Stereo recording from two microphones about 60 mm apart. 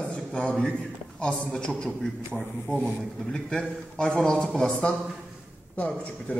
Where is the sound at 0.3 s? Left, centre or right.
Centre.